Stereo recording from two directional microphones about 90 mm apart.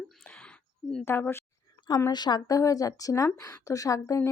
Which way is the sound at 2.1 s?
50° left (ahead or behind).